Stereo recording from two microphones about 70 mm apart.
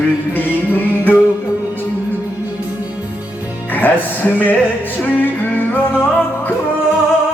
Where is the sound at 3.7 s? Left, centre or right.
Left.